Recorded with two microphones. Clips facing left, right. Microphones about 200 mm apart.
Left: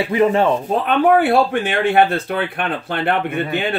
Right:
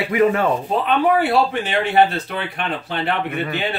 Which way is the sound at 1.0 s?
50° left (ahead or behind).